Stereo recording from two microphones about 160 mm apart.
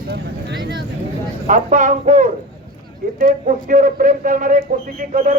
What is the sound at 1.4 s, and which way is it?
A man's voice, 50° right (ahead or behind).